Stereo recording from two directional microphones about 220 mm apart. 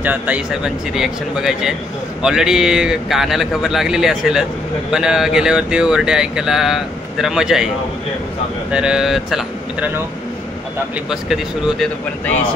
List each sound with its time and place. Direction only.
0.0 s speech: 5° right (ahead or behind)
8.7 s speech: 5° right (ahead or behind)
11.1 s speech: centre (ahead or behind)